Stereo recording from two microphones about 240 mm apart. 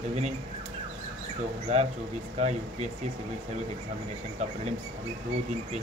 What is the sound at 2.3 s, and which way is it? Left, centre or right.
Speech, right.